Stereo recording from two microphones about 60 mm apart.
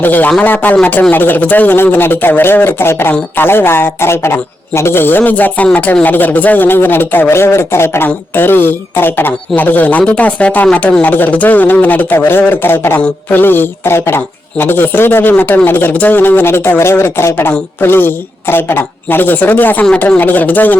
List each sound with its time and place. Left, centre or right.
0.0 s speech: left